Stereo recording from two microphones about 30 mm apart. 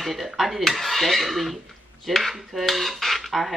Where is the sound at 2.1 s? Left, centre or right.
Centre.